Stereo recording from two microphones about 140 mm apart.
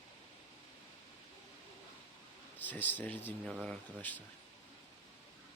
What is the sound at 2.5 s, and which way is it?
Speech, 10° left (ahead or behind).